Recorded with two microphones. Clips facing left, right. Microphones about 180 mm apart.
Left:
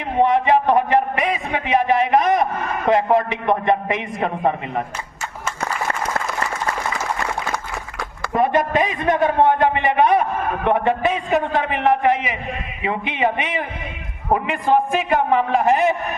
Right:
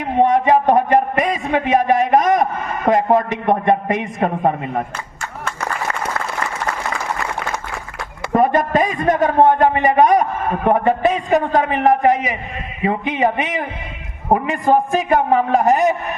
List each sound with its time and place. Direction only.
0.2 s a man's voice: 45° right (ahead or behind)
8.3 s a man's voice: 45° right (ahead or behind)